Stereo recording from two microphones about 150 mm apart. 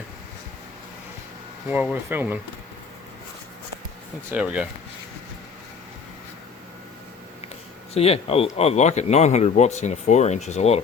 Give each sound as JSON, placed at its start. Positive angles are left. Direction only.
{"t": 1.7, "sound": "speech", "side_deg": -10}
{"t": 4.3, "sound": "speech", "side_deg": -10}
{"t": 7.9, "sound": "speech", "side_deg": 40}